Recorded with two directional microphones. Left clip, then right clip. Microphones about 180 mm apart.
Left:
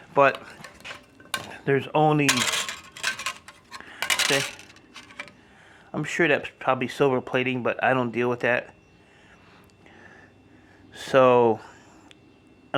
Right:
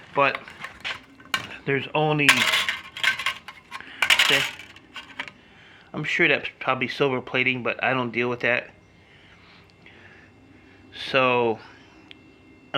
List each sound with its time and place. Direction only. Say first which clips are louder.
0.1 s speech: left 2 dB; 30° left (ahead or behind)
1.3 s dishes: even; 25° left (ahead or behind)
2.2 s cutlery: right 5 dB; 15° left (ahead or behind)
2.6 s a sound: right 6 dB; 20° left (ahead or behind)
3.8 s coin: right 2 dB; 30° left (ahead or behind)
4.0 s coin: right 6 dB; 10° left (ahead or behind)
5.9 s speech: right 2 dB; 30° left (ahead or behind)
10.9 s speech: left 3 dB; 45° left (ahead or behind)